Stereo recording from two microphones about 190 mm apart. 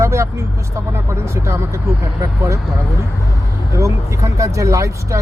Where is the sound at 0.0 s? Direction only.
15° right (ahead or behind).